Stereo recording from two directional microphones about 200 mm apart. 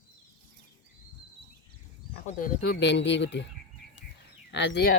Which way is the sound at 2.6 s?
60° left (ahead or behind).